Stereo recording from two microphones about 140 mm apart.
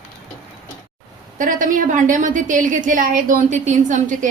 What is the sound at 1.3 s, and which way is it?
A woman's voice, 65° right (ahead or behind).